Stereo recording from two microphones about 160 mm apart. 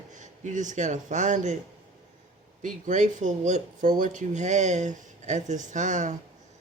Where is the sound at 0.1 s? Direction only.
50° right (ahead or behind).